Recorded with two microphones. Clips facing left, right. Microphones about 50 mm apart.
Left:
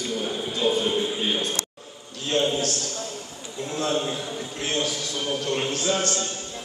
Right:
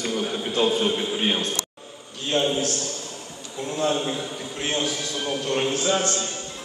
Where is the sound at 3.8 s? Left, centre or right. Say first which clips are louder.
Right 2 dB; centre.